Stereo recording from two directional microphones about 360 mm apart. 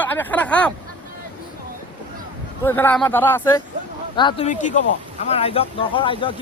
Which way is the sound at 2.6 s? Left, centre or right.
Centre.